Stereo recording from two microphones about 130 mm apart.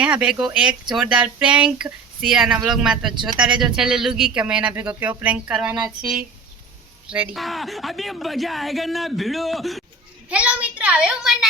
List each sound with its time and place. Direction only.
0.0 s speech: 10° right (ahead or behind)